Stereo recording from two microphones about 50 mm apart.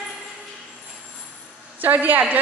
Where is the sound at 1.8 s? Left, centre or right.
Right.